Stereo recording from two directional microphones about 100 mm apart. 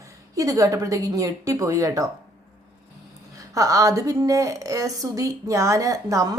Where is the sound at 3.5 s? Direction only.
35° right (ahead or behind).